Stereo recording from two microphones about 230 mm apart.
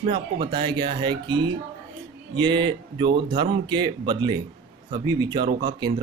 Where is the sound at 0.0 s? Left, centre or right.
Right.